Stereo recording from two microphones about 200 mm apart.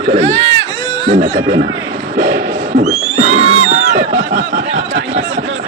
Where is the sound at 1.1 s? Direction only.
60° right (ahead or behind).